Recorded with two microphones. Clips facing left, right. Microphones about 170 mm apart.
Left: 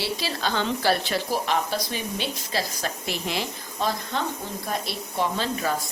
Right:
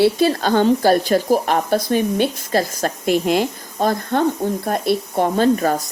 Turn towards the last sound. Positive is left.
turn(degrees=-50)  # may be behind; listen again after turning